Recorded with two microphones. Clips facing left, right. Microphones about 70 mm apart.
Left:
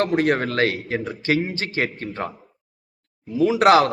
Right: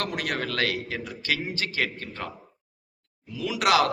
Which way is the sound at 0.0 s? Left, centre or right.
Left.